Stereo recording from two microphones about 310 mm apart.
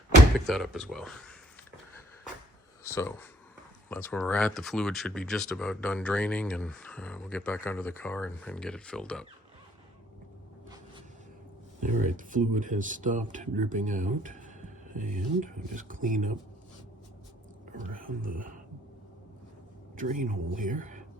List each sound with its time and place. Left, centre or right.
0.3 s speech: centre
2.8 s speech: centre
11.8 s speech: right
17.9 s speech: right
20.0 s speech: right